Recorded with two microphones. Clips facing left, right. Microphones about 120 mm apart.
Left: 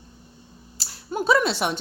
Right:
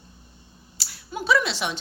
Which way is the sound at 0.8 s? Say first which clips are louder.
Left 5 dB; 45° left (ahead or behind).